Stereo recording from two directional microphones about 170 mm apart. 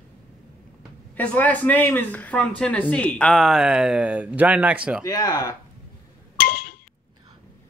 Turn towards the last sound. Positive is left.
turn(degrees=55)  # may be behind; listen again after turning